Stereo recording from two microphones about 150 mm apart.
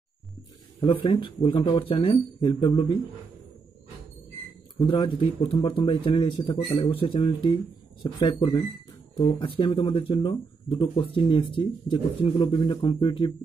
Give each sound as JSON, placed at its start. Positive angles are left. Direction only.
{"t": 1.0, "sound": "a man's voice", "side_deg": 35}
{"t": 4.7, "sound": "a man's voice", "side_deg": 30}